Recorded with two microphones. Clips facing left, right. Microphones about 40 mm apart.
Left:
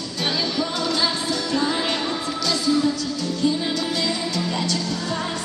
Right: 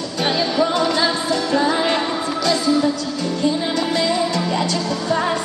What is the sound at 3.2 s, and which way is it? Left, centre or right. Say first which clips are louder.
Music: right 3 dB; right.